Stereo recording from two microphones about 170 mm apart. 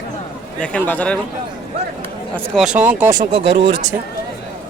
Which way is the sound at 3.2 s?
30° right (ahead or behind).